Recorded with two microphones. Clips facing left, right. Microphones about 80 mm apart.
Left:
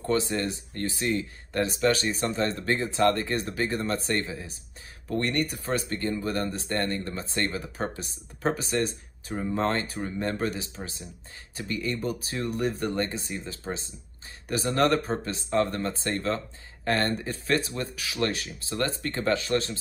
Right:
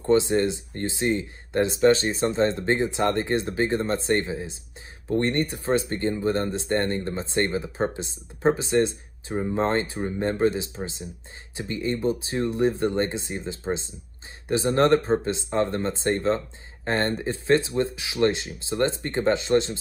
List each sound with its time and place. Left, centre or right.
0.0 s speech: right